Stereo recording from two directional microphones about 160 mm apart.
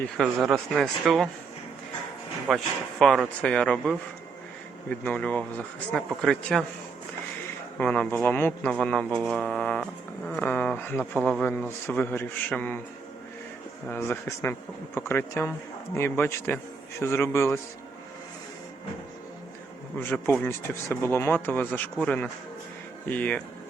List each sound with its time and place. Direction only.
0.4 s speech: centre (ahead or behind)
2.5 s speech: centre (ahead or behind)
7.8 s speech: 5° left (ahead or behind)
13.9 s speech: 15° left (ahead or behind)
20.0 s speech: 15° left (ahead or behind)